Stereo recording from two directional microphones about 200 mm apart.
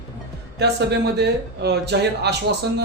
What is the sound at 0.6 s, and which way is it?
Speech, 55° right (ahead or behind).